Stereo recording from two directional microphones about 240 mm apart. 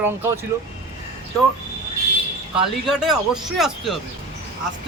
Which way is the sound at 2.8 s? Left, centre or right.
Centre.